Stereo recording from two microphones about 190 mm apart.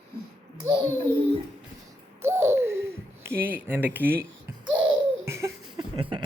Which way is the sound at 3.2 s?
10° right (ahead or behind).